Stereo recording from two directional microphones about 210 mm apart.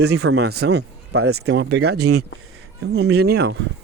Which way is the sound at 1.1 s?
90° right.